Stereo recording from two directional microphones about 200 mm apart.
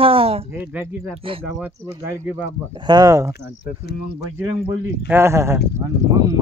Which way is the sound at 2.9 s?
15° right (ahead or behind).